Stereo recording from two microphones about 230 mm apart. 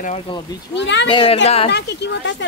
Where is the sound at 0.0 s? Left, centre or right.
Left.